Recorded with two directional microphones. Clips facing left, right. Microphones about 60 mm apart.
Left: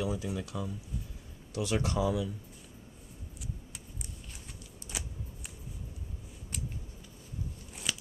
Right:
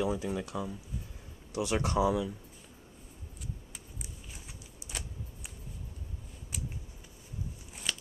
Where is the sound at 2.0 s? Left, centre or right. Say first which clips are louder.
Right 5 dB; centre.